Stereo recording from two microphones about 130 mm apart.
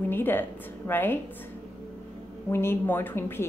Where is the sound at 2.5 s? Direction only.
20° left (ahead or behind).